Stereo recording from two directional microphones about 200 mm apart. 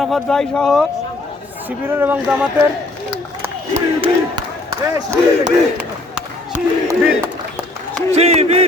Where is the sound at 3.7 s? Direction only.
30° right (ahead or behind).